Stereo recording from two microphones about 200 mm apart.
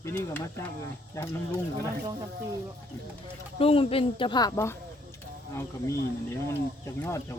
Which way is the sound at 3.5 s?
30° left (ahead or behind).